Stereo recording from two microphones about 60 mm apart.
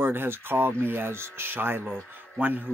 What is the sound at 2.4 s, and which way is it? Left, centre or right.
Speech, right.